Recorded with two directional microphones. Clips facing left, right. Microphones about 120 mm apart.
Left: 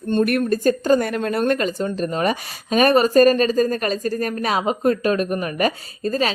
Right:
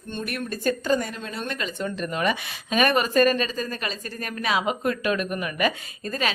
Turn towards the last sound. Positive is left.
turn(degrees=35)  # may be behind; listen again after turning